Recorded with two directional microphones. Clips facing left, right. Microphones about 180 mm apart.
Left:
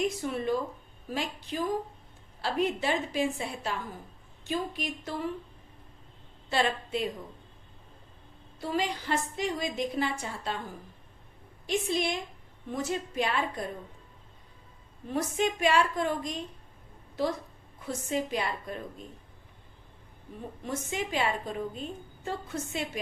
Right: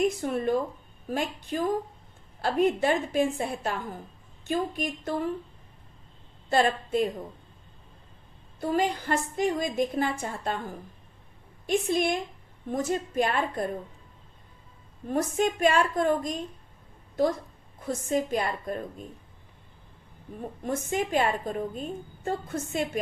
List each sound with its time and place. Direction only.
0.0 s a woman's voice: 50° right (ahead or behind)
6.5 s a woman's voice: 50° right (ahead or behind)
8.6 s a woman's voice: 50° right (ahead or behind)
11.6 s a woman's voice: 50° right (ahead or behind)
15.0 s a woman's voice: 45° right (ahead or behind)
20.7 s a woman's voice: 50° right (ahead or behind)